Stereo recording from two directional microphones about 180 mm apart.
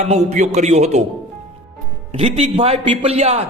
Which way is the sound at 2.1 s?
30° right (ahead or behind).